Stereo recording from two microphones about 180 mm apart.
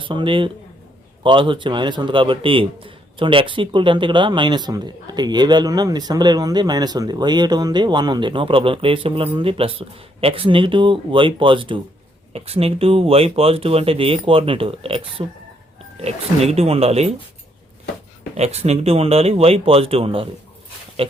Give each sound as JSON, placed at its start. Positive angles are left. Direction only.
{"t": 0.0, "sound": "speech", "side_deg": -25}
{"t": 18.3, "sound": "speech", "side_deg": -35}